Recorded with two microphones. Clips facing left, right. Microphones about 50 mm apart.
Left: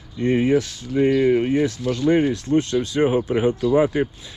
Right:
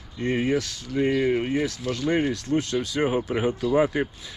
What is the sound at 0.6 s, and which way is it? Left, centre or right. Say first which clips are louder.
Speech: left 5 dB; left.